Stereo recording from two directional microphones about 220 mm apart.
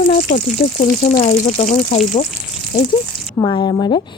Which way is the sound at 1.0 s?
35° left (ahead or behind).